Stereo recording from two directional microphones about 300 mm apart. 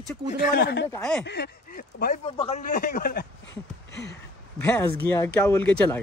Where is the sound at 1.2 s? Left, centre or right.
Left.